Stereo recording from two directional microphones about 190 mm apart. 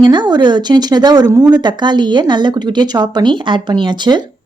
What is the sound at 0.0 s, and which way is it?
Speech, 25° right (ahead or behind).